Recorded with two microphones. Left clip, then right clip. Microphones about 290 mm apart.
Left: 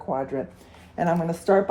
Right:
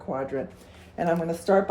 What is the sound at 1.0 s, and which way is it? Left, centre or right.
Speech, left.